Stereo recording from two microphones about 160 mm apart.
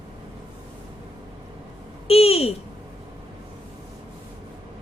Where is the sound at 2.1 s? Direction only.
40° left (ahead or behind).